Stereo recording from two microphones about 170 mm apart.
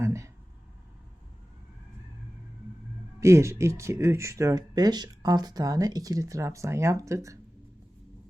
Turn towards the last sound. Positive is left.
turn(degrees=-20)  # may be behind; listen again after turning